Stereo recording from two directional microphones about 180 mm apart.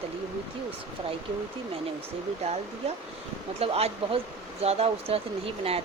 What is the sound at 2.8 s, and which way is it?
Speech, 35° right (ahead or behind).